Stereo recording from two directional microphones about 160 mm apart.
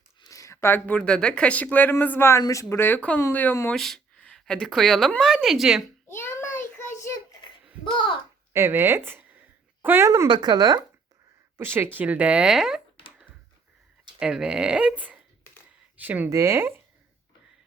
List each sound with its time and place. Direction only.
0.2 s speech: 20° left (ahead or behind)
3.8 s speech: centre (ahead or behind)
6.1 s child singing: 15° left (ahead or behind)
7.9 s a child's voice: 30° left (ahead or behind)
8.5 s speech: 15° right (ahead or behind)
11.5 s speech: 15° right (ahead or behind)
14.2 s speech: 5° right (ahead or behind)